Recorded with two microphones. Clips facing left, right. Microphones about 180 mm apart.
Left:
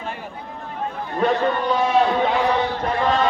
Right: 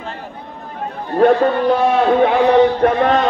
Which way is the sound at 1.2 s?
60° right (ahead or behind).